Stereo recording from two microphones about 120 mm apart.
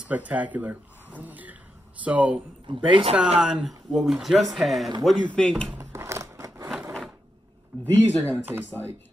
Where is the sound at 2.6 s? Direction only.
45° right (ahead or behind).